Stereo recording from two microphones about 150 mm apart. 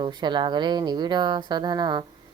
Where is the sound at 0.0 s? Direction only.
30° right (ahead or behind).